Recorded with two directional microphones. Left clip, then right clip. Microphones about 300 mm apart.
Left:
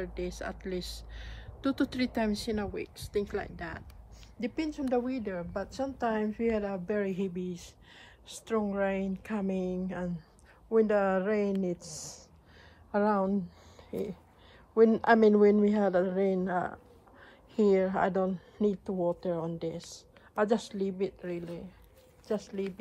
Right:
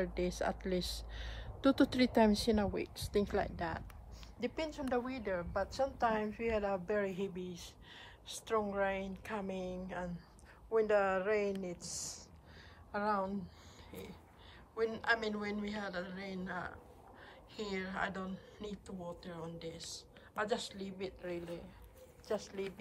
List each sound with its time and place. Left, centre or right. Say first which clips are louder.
0.0 s a woman's voice: right 1 dB; centre
17.7 s a woman's voice: left 12 dB; centre